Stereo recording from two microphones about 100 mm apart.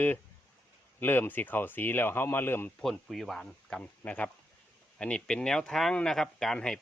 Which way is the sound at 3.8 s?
15° left (ahead or behind).